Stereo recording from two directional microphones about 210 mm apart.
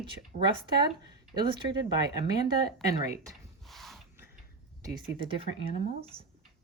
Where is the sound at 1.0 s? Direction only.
20° right (ahead or behind).